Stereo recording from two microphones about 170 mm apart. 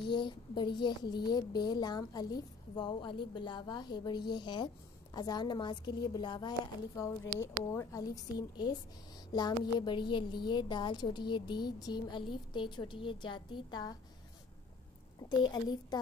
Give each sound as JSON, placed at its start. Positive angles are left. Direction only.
{"t": 0.0, "sound": "a woman's voice", "side_deg": 30}
{"t": 15.1, "sound": "a woman's voice", "side_deg": 25}